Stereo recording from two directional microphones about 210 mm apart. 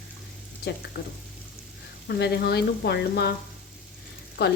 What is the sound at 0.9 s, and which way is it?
Speech, 50° left (ahead or behind).